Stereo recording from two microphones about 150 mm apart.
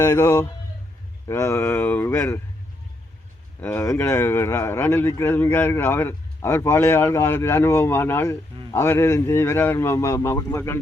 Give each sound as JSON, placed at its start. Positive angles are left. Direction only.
{"t": 0.0, "sound": "a man's voice", "side_deg": 20}
{"t": 3.6, "sound": "speech", "side_deg": 15}